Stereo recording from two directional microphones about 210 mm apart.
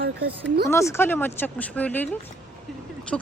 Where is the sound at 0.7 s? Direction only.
15° left (ahead or behind).